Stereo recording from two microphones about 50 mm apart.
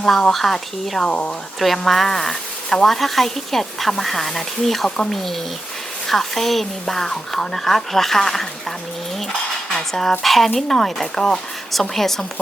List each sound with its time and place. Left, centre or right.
0.0 s a woman's voice: centre
1.0 s speech: left
1.5 s a woman's voice: centre
9.6 s a woman's voice: centre